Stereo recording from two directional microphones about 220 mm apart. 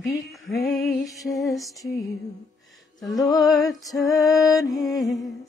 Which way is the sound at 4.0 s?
15° left (ahead or behind).